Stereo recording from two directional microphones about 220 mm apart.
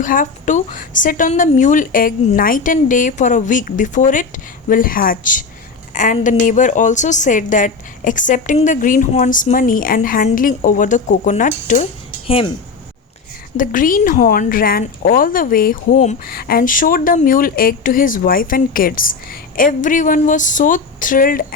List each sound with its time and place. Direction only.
0.0 s speech: 35° left (ahead or behind)
13.6 s speech: 35° left (ahead or behind)